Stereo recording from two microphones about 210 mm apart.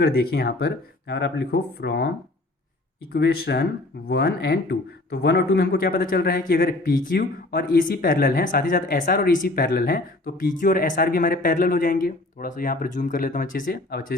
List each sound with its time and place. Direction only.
0.0 s speech: 50° left (ahead or behind)